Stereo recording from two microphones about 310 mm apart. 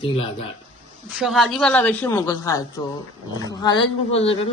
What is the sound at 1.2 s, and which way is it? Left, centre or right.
A man's voice, centre.